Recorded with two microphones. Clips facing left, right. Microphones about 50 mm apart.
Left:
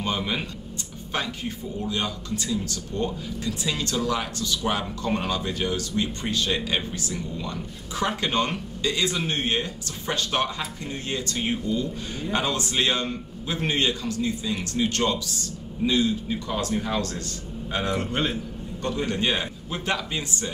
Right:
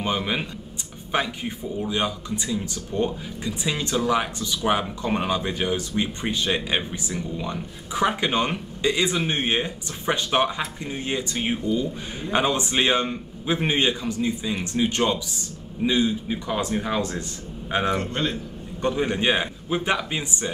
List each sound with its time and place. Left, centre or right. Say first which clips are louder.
0.0 s a man's voice: right 2 dB; centre
18.0 s a man's voice: even; centre
18.8 s speech: right 3 dB; right